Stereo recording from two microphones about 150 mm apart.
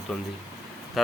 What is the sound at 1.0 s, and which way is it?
Speech, centre (ahead or behind).